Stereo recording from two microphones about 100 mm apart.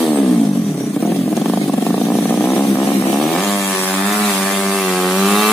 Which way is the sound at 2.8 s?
Centre (ahead or behind).